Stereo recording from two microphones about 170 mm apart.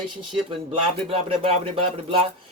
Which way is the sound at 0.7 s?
35° right (ahead or behind).